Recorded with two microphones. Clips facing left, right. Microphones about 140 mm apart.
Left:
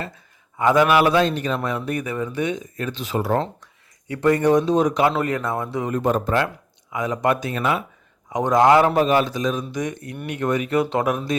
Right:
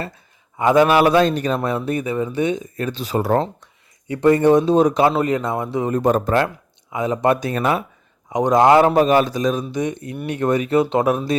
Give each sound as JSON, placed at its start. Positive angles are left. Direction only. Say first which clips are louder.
{"t": 0.6, "sound": "a man's voice", "louder": "right 2 dB", "side_deg": -25}
{"t": 4.1, "sound": "speech", "louder": "right 3 dB", "side_deg": -25}
{"t": 6.0, "sound": "speech", "louder": "right 3 dB", "side_deg": -45}
{"t": 6.9, "sound": "a man's voice", "louder": "right 3 dB", "side_deg": -25}
{"t": 8.3, "sound": "speech", "louder": "right 2 dB", "side_deg": -20}
{"t": 9.0, "sound": "a man's voice", "louder": "right 3 dB", "side_deg": -40}
{"t": 9.7, "sound": "a man's voice", "louder": "right 4 dB", "side_deg": -25}